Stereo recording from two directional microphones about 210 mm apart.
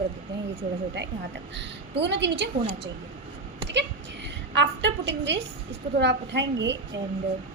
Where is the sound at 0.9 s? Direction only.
55° right (ahead or behind).